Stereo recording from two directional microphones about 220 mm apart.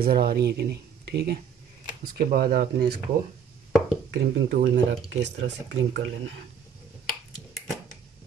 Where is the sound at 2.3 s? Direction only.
45° right (ahead or behind).